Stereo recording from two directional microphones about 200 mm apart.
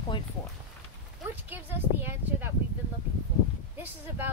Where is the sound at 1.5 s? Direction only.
10° right (ahead or behind).